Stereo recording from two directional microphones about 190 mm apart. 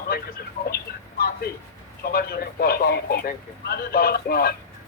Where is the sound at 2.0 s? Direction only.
55° left (ahead or behind).